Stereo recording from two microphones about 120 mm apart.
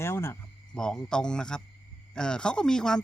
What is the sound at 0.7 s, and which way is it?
Speech, 5° left (ahead or behind).